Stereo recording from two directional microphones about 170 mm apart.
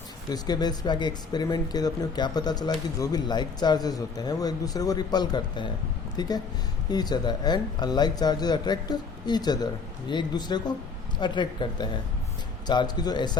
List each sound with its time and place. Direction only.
0.3 s speech: 25° left (ahead or behind)